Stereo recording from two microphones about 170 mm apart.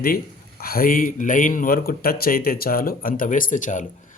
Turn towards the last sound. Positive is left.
turn(degrees=50)  # may be behind; listen again after turning